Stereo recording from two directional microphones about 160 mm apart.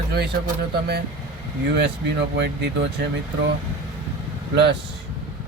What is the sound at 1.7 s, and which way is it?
Speech, 90° right.